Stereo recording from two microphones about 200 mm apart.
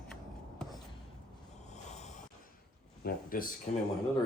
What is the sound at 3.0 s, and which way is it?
Speech, 45° left (ahead or behind).